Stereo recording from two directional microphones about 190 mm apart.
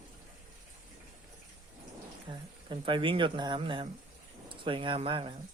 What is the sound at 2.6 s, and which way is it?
Speech, 25° right (ahead or behind).